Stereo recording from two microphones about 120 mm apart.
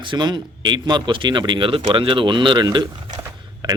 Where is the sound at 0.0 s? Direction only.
40° right (ahead or behind).